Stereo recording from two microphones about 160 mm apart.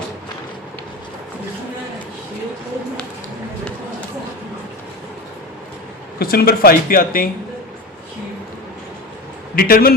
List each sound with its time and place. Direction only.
6.1 s speech: 70° left (ahead or behind)
9.6 s speech: 65° left (ahead or behind)